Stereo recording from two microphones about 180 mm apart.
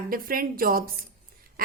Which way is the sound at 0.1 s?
55° right (ahead or behind).